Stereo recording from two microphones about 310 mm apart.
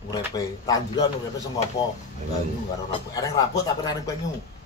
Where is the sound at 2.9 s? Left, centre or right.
Centre.